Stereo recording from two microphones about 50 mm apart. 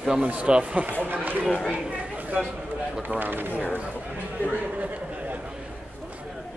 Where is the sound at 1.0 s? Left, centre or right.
Right.